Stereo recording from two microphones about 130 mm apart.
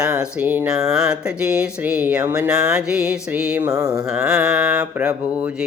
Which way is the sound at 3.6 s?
25° right (ahead or behind).